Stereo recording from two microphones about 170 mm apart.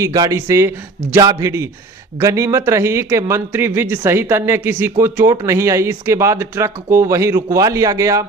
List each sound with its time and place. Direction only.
0.0 s speech: 20° right (ahead or behind)